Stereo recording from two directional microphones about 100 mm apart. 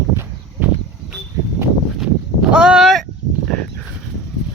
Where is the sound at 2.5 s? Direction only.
5° right (ahead or behind).